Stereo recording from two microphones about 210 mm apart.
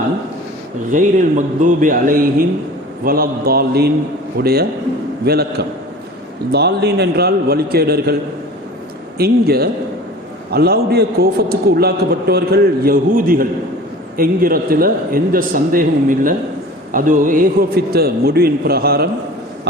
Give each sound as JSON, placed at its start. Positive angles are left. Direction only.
{"t": 0.9, "sound": "a man's voice", "side_deg": -40}
{"t": 9.1, "sound": "a man's voice", "side_deg": -50}